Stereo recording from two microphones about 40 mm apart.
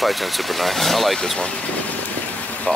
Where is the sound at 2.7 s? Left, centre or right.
Left.